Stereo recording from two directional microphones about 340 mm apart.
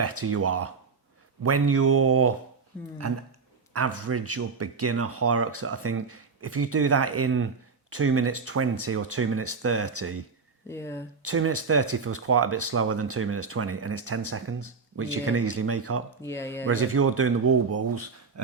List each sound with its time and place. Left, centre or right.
0.0 s speech: right
3.7 s speech: right
10.7 s speech: centre
11.3 s speech: right
16.2 s speech: centre
16.6 s speech: right